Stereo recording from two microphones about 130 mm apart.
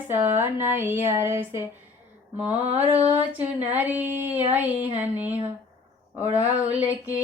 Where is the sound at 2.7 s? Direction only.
15° right (ahead or behind).